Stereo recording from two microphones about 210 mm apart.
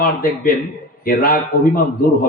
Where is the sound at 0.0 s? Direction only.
45° left (ahead or behind).